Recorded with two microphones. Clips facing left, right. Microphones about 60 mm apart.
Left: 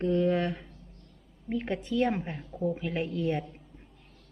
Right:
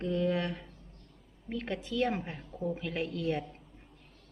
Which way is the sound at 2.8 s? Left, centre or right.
Centre.